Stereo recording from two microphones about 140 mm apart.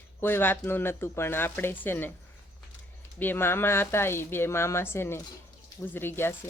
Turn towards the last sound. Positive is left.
turn(degrees=15)  # may be behind; listen again after turning